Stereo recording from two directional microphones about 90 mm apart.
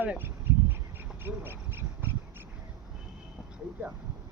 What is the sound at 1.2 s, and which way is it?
Owl, 25° right (ahead or behind).